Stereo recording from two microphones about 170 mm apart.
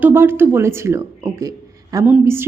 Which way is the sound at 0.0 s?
15° right (ahead or behind).